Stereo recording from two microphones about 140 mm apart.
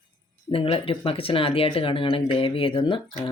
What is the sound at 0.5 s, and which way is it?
Speech, 40° left (ahead or behind).